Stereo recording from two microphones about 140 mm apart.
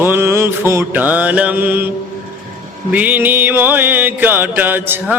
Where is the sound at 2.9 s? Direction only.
10° right (ahead or behind).